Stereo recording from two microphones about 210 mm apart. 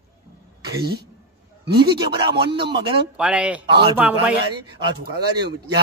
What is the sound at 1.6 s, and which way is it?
Speech, 50° right (ahead or behind).